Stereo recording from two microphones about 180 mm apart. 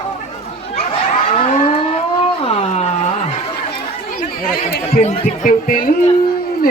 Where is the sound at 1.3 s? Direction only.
35° left (ahead or behind).